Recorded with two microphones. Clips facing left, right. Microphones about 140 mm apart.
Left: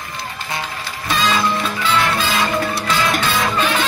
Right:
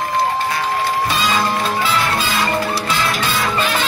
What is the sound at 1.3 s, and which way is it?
Music, 45° right (ahead or behind).